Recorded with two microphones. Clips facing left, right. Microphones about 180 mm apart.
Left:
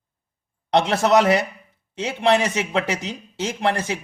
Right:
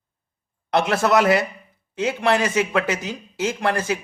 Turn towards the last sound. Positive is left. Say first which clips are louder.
# right 1 dB
turn(degrees=25)  # may be behind; listen again after turning